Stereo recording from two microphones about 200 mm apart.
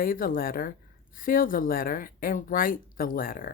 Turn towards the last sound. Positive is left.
turn(degrees=45)  # may be behind; listen again after turning